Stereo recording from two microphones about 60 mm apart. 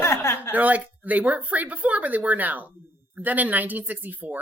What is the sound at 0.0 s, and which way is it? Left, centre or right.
Chuckle, left.